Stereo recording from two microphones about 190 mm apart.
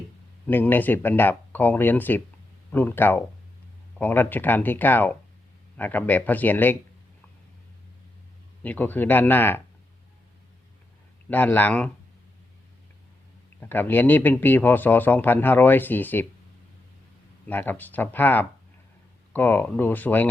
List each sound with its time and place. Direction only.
0.4 s speech: 10° left (ahead or behind)
8.6 s speech: 10° left (ahead or behind)
11.3 s speech: 10° left (ahead or behind)
13.6 s speech: 10° left (ahead or behind)
17.4 s speech: 10° left (ahead or behind)